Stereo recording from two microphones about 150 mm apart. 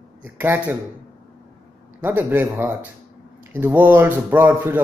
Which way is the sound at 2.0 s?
15° right (ahead or behind).